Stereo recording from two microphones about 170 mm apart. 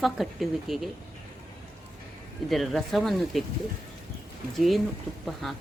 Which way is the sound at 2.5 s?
Centre (ahead or behind).